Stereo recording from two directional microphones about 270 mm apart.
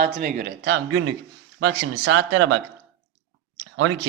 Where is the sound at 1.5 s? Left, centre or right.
Right.